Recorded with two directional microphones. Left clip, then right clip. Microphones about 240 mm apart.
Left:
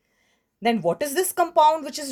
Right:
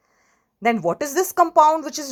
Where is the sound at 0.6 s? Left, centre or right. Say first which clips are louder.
Right 2 dB; centre.